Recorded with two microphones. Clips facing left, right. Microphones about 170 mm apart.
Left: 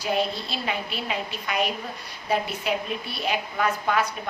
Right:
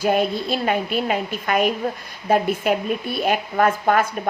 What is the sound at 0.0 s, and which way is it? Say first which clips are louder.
A woman's voice: right 6 dB; 50° right (ahead or behind).